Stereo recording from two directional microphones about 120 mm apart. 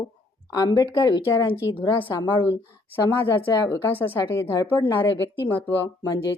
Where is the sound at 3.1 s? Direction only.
15° left (ahead or behind).